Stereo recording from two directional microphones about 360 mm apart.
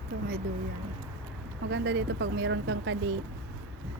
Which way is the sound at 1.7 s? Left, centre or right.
Right.